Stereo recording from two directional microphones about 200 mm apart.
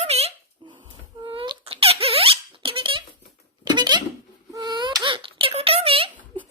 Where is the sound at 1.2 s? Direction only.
25° right (ahead or behind).